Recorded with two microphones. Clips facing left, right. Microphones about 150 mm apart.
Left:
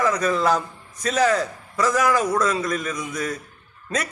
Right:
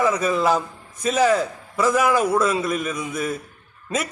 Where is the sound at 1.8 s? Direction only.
10° right (ahead or behind).